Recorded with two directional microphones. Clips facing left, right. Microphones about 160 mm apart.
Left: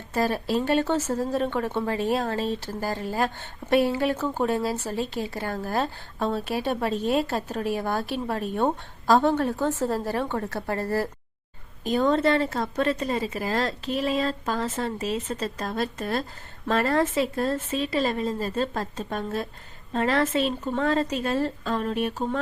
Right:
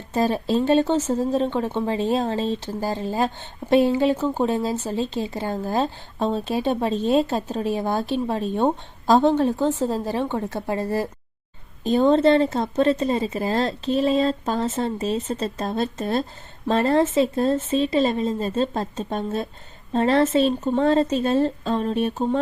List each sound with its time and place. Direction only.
0.1 s speech: 20° right (ahead or behind)